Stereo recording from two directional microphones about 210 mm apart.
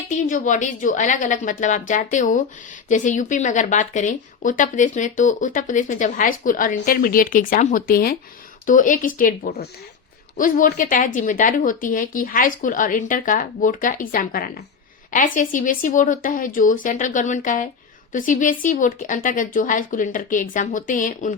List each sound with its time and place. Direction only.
0.3 s speech: 35° left (ahead or behind)